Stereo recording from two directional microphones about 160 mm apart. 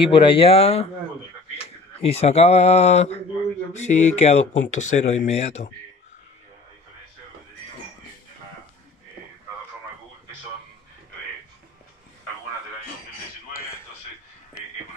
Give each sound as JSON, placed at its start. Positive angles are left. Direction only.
{"t": 0.1, "sound": "speech", "side_deg": 30}
{"t": 2.0, "sound": "speech", "side_deg": 40}